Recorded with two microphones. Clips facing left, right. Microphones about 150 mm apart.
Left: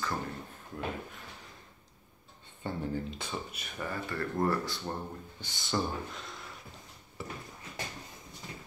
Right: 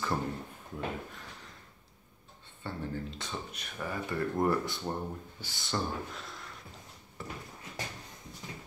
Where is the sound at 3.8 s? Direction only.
15° right (ahead or behind).